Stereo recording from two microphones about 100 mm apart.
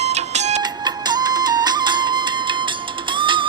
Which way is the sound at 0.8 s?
45° right (ahead or behind).